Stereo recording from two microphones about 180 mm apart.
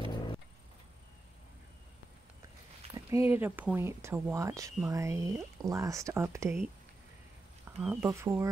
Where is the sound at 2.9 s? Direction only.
15° right (ahead or behind).